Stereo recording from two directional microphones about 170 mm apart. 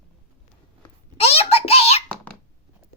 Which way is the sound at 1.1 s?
35° left (ahead or behind).